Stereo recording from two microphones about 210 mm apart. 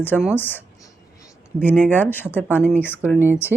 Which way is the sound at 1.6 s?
10° left (ahead or behind).